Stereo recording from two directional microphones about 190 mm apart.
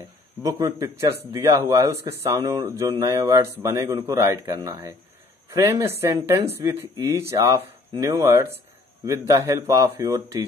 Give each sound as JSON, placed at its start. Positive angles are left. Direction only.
{"t": 0.0, "sound": "speech", "side_deg": -15}